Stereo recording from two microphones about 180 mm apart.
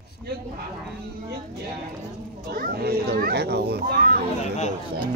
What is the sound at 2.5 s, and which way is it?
Speech, 60° right (ahead or behind).